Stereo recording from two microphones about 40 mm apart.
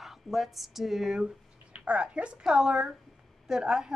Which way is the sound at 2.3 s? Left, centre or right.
Centre.